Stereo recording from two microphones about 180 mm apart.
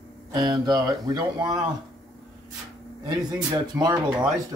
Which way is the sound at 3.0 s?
20° right (ahead or behind).